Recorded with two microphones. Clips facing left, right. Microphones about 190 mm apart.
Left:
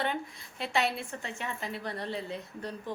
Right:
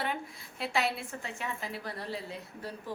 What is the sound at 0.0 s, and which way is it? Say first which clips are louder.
A woman's voice: left 3 dB; 5° right (ahead or behind).